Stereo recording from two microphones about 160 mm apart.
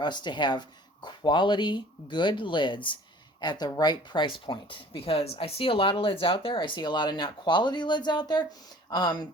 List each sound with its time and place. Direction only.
0.0 s speech: 30° left (ahead or behind)